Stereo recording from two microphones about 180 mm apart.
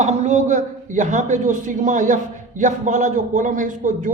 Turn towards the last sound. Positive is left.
turn(degrees=-45)  # may be behind; listen again after turning